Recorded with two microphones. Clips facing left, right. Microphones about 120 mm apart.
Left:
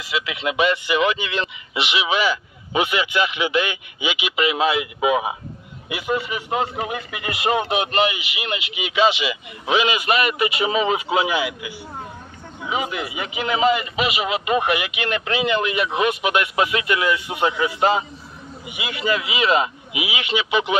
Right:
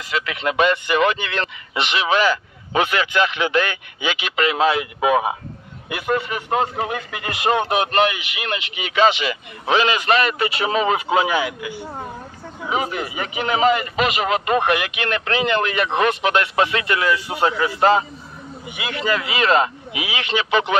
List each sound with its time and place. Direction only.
0.0 s a man's voice: 45° right (ahead or behind)